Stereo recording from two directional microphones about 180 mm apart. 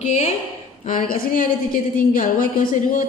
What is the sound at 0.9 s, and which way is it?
A woman's voice, 50° left (ahead or behind).